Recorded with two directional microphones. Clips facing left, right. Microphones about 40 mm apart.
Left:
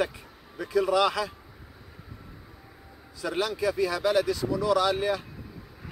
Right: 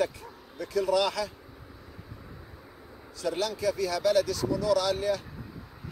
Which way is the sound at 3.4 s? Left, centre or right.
Centre.